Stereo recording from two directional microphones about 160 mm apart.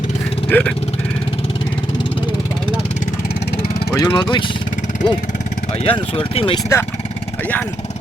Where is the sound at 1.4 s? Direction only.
35° left (ahead or behind).